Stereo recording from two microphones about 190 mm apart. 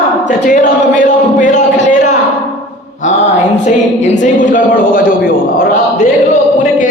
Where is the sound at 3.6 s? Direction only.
40° left (ahead or behind).